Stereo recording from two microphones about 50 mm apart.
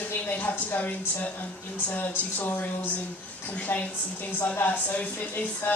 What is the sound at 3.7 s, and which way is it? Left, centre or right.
Speech, left.